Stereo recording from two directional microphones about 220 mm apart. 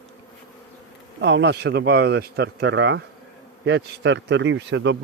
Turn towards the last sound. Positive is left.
turn(degrees=-55)  # may be behind; listen again after turning